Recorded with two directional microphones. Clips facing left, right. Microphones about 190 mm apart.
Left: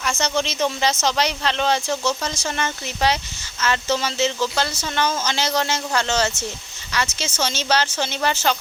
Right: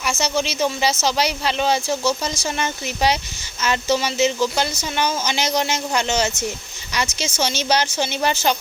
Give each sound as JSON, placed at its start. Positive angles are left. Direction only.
{"t": 0.0, "sound": "speech", "side_deg": -5}